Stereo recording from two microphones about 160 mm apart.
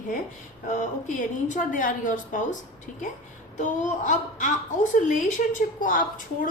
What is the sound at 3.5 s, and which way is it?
A woman's voice, 50° left (ahead or behind).